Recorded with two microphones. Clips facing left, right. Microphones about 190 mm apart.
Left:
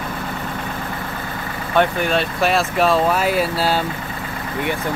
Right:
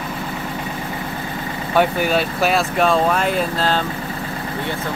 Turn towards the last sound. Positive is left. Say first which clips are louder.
# left 1 dB
turn(degrees=10)  # may be behind; listen again after turning